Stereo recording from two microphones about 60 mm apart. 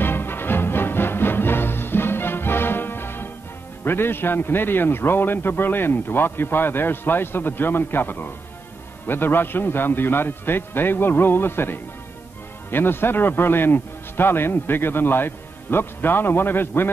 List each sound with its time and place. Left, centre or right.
0.0 s music: left
3.8 s a man's voice: left